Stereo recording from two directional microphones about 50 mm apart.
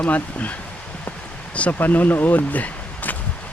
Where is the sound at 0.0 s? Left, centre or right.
Left.